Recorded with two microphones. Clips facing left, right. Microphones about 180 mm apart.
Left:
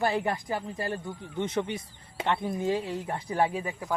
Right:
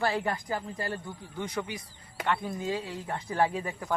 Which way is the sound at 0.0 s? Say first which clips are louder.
Left 2 dB; 20° left (ahead or behind).